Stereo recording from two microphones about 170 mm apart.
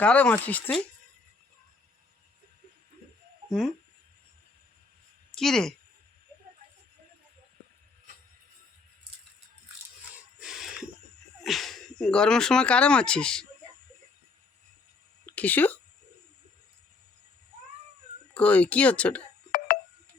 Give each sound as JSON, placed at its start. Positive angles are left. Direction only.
{"t": 0.0, "sound": "speech", "side_deg": 10}
{"t": 3.5, "sound": "speech", "side_deg": 0}
{"t": 5.3, "sound": "speech", "side_deg": 0}
{"t": 10.4, "sound": "a sound", "side_deg": -5}
{"t": 11.4, "sound": "speech", "side_deg": 0}
{"t": 15.3, "sound": "speech", "side_deg": 10}
{"t": 18.3, "sound": "speech", "side_deg": 10}
{"t": 19.5, "sound": "tick", "side_deg": 60}